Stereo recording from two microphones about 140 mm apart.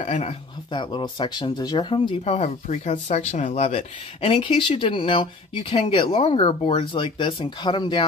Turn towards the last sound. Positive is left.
turn(degrees=35)  # may be behind; listen again after turning